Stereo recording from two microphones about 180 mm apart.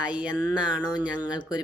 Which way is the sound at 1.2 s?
20° left (ahead or behind).